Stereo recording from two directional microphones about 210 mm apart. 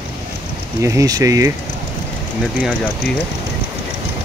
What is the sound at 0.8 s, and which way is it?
Speech, 15° right (ahead or behind).